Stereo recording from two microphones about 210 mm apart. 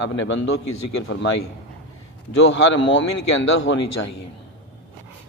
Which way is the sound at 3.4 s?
65° left (ahead or behind).